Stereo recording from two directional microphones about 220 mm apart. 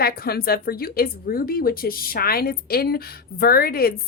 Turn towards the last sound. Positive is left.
turn(degrees=45)  # may be behind; listen again after turning